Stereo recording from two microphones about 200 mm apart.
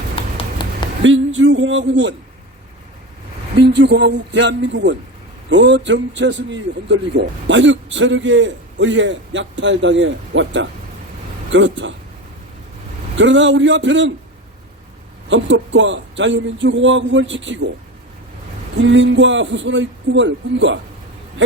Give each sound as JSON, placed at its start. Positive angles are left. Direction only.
{"t": 0.2, "sound": "clip-clop", "side_deg": 25}
{"t": 1.0, "sound": "a man's voice", "side_deg": -70}
{"t": 3.6, "sound": "a man's voice", "side_deg": -55}
{"t": 13.1, "sound": "a man's voice", "side_deg": -65}
{"t": 15.3, "sound": "a man's voice", "side_deg": -70}
{"t": 18.8, "sound": "speech", "side_deg": -65}